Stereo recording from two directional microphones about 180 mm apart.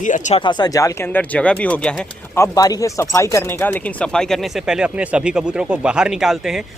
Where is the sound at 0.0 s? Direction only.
45° left (ahead or behind).